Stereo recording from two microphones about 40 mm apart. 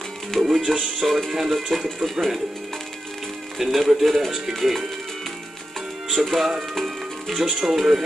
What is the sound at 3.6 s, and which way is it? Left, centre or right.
Speech, centre.